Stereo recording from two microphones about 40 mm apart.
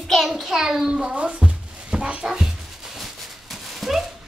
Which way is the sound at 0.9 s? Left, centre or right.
Right.